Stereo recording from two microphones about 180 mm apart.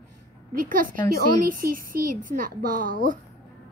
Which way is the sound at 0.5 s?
50° right (ahead or behind).